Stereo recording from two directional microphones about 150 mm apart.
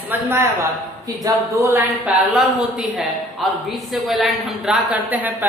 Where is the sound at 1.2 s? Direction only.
25° right (ahead or behind).